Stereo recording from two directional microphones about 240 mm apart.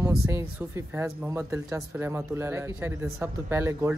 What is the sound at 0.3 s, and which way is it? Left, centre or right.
Speech, centre.